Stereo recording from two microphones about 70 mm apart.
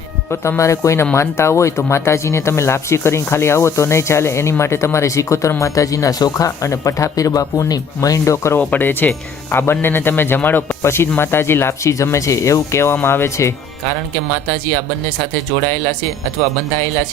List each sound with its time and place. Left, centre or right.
0.3 s speech: left
8.2 s speech: left
8.5 s speech: left